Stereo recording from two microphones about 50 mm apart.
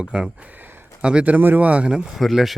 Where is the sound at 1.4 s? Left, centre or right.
Right.